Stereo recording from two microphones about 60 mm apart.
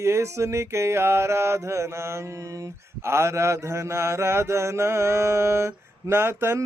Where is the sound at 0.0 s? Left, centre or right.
Right.